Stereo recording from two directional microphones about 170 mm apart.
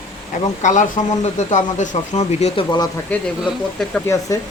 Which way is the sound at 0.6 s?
45° left (ahead or behind).